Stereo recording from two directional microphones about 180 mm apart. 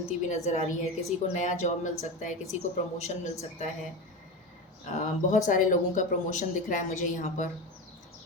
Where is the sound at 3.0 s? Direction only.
40° left (ahead or behind).